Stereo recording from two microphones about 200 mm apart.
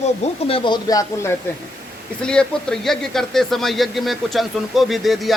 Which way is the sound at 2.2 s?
5° left (ahead or behind).